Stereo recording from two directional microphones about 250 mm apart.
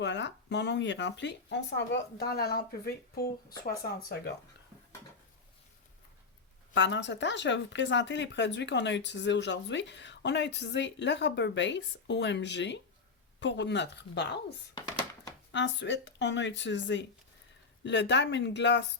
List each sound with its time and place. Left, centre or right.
0.0 s speech: left
6.7 s speech: left
15.5 s speech: left